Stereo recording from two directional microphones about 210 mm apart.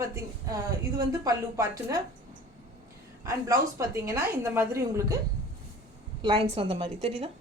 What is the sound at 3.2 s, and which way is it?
A woman's voice, 15° right (ahead or behind).